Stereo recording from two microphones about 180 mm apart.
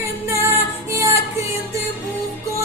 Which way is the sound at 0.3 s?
15° right (ahead or behind).